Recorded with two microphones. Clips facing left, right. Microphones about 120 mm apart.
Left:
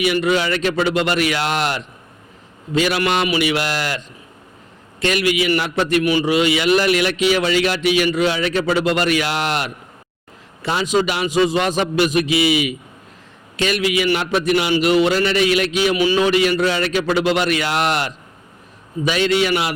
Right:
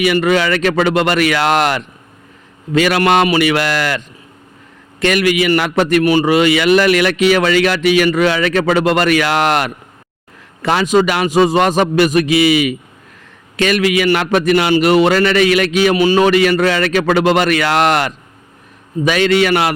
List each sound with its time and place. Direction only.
0.0 s a man's voice: 60° right (ahead or behind); by 1.8 s 75° right (ahead or behind)
2.7 s a man's voice: 60° right (ahead or behind)
10.8 s a man's voice: 55° right (ahead or behind)